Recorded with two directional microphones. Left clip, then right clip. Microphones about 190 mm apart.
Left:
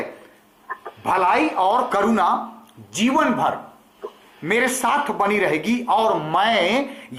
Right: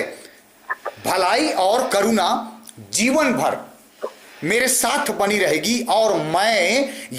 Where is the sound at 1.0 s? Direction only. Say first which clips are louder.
Left 1 dB; 60° right (ahead or behind); by 2.3 s 90° right.